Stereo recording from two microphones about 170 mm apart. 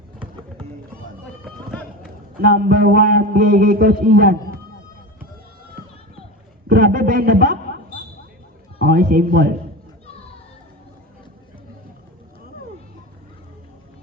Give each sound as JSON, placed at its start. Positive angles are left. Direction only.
{"t": 1.2, "sound": "run", "side_deg": 5}
{"t": 2.0, "sound": "a man's voice", "side_deg": -60}
{"t": 6.7, "sound": "a man's voice", "side_deg": -55}